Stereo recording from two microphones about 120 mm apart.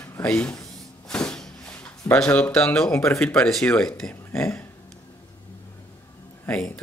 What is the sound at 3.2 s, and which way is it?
Speech, 5° left (ahead or behind).